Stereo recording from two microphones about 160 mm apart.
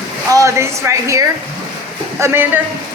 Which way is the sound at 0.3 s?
20° right (ahead or behind).